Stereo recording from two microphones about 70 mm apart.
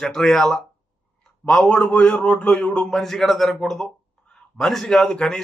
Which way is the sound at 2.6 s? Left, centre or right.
Centre.